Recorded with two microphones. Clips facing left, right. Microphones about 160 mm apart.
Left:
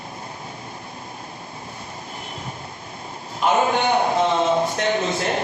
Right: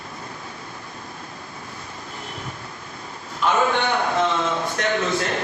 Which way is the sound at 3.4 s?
35° left (ahead or behind).